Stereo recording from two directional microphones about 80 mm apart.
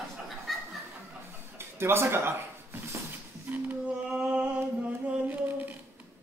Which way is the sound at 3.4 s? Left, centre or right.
Centre.